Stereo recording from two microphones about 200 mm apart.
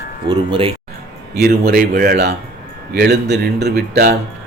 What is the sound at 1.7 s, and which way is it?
Speech, 50° right (ahead or behind).